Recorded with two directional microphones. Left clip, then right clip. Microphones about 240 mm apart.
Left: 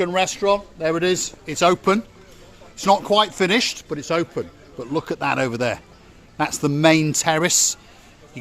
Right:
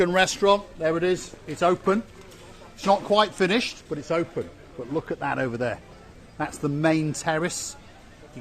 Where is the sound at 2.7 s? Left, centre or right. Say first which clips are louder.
Left 4 dB; left.